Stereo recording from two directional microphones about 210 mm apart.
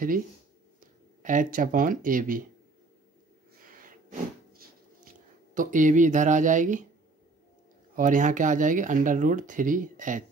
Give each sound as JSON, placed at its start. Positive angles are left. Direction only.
{"t": 1.2, "sound": "speech", "side_deg": -40}
{"t": 4.6, "sound": "a sound", "side_deg": -40}
{"t": 7.9, "sound": "speech", "side_deg": -40}